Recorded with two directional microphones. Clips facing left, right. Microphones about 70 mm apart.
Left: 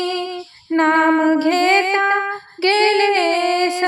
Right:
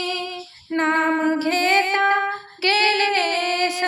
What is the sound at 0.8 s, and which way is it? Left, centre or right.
Female singing, left.